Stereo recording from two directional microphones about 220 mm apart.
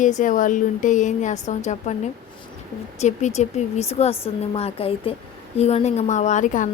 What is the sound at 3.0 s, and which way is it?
A woman's voice, 30° left (ahead or behind).